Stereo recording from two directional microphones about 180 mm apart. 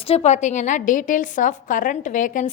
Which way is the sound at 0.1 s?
40° left (ahead or behind).